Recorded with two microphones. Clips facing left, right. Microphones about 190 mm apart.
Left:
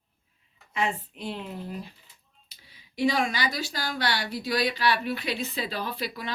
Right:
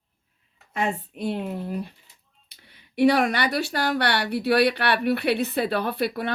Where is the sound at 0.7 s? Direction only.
50° right (ahead or behind).